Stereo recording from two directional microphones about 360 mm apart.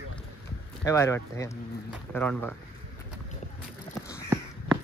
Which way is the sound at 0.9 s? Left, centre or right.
Centre.